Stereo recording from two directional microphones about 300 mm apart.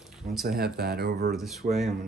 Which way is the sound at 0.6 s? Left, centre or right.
Right.